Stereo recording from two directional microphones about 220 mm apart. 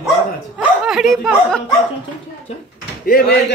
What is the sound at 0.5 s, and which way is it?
Speech, centre (ahead or behind).